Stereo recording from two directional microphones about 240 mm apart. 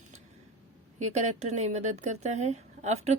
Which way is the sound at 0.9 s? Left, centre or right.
Right.